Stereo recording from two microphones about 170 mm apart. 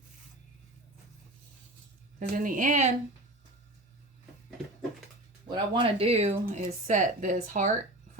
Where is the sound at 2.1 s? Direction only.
50° right (ahead or behind).